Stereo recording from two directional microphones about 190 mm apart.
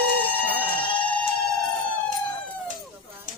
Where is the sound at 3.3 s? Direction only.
40° right (ahead or behind).